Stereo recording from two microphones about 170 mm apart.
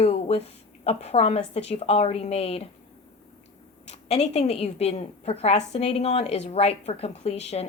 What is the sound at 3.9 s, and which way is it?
A woman's voice, 40° left (ahead or behind).